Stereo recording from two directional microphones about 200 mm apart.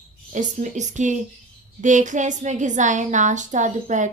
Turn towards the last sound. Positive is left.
turn(degrees=-40)  # may be behind; listen again after turning